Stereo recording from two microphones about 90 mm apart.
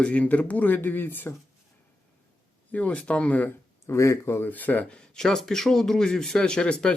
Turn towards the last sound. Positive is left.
turn(degrees=10)  # may be behind; listen again after turning